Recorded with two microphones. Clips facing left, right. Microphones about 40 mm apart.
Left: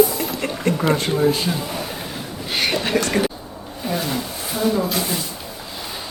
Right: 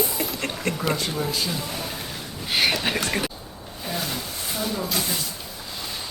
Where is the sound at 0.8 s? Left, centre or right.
Left.